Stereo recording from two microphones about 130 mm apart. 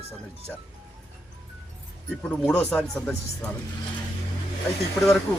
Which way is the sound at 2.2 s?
10° left (ahead or behind).